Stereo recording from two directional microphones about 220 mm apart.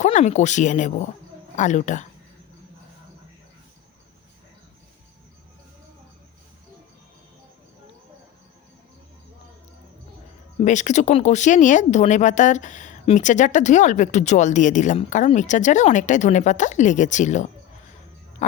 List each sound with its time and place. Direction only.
0.0 s speech: 35° left (ahead or behind)
10.6 s speech: 35° left (ahead or behind)